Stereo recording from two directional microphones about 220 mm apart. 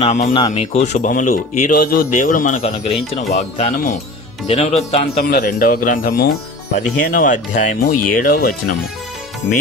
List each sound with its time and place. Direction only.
0.0 s speech: 30° left (ahead or behind)
5.3 s speech: 45° left (ahead or behind)
7.9 s speech: 90° left
8.1 s speech: 40° left (ahead or behind)